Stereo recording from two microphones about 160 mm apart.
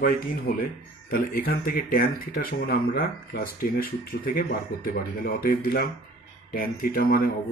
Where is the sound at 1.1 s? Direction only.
70° left (ahead or behind).